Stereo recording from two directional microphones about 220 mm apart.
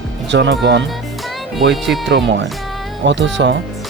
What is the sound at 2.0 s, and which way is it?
Speech, 55° right (ahead or behind).